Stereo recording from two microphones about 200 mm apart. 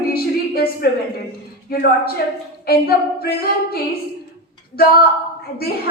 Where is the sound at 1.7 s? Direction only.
50° left (ahead or behind).